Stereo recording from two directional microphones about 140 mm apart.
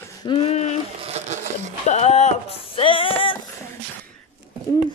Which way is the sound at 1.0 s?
50° right (ahead or behind).